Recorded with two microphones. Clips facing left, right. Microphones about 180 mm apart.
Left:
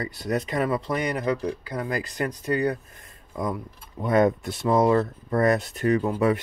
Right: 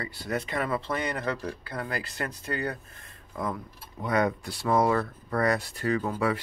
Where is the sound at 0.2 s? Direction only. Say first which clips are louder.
Left 5 dB; 20° left (ahead or behind).